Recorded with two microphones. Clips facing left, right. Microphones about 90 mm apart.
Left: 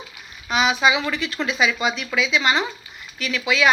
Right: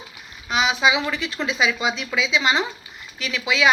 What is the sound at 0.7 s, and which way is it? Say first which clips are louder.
A woman's voice: even; 10° right (ahead or behind).